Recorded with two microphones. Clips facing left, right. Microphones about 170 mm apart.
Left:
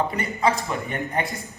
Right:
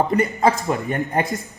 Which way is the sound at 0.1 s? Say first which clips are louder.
Right 5 dB; 40° right (ahead or behind).